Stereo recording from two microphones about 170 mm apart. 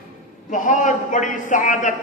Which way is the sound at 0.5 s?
50° left (ahead or behind).